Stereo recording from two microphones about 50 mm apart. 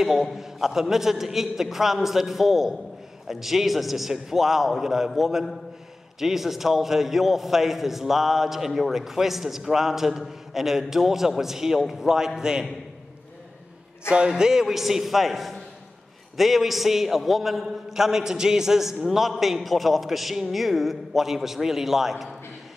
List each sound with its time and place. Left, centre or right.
0.0 s a man's voice: centre
14.0 s a man's voice: centre